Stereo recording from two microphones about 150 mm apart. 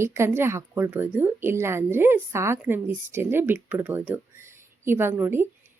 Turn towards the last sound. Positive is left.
turn(degrees=-15)  # may be behind; listen again after turning